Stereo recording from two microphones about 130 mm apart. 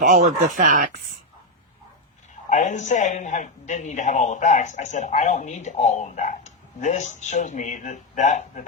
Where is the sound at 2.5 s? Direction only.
70° left (ahead or behind).